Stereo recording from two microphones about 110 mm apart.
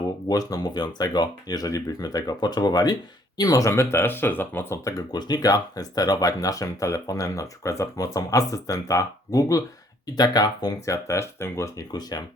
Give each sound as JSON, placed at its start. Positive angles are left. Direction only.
{"t": 0.3, "sound": "speech", "side_deg": 35}
{"t": 4.9, "sound": "speech", "side_deg": 35}